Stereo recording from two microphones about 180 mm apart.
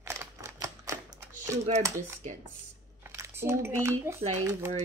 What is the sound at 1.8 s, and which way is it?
Speech, 15° right (ahead or behind).